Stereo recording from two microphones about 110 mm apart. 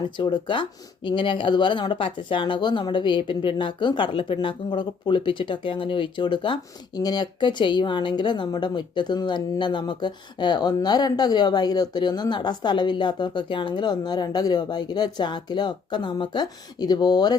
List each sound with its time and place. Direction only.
0.2 s speech: 45° left (ahead or behind)